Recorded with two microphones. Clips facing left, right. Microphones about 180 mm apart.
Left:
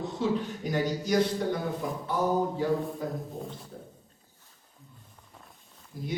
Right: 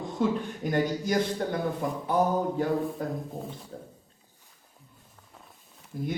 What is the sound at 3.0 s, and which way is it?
Speech, 55° right (ahead or behind).